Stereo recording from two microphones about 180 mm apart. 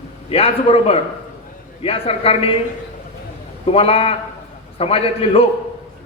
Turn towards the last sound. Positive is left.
turn(degrees=35)  # may be behind; listen again after turning